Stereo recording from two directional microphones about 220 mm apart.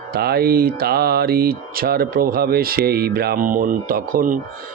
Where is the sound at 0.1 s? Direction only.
45° right (ahead or behind).